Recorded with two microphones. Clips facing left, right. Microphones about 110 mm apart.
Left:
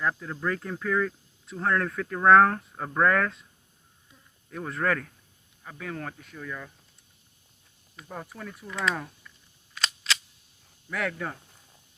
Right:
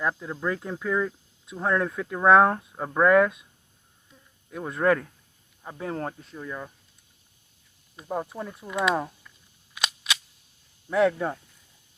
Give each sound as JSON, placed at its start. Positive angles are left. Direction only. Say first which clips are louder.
{"t": 0.0, "sound": "speech", "louder": "right 1 dB", "side_deg": -15}
{"t": 4.4, "sound": "speech", "louder": "right 5 dB", "side_deg": -10}
{"t": 5.6, "sound": "speech", "louder": "right 5 dB", "side_deg": -30}
{"t": 7.9, "sound": "speech", "louder": "right 9 dB", "side_deg": -25}
{"t": 9.7, "sound": "a sound", "louder": "even", "side_deg": -15}
{"t": 10.8, "sound": "speech", "louder": "right 9 dB", "side_deg": -25}